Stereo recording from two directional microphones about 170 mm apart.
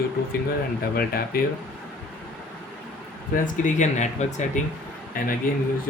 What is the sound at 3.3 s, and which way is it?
Speech, 50° left (ahead or behind).